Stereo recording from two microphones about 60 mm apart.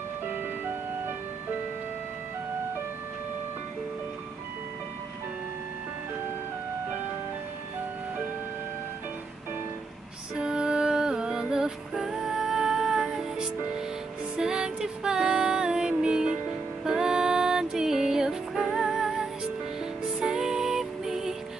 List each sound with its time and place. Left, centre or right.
10.3 s music: centre